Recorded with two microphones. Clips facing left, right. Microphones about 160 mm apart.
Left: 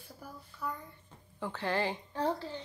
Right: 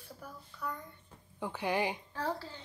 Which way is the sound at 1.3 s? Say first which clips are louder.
Even; 15° right (ahead or behind).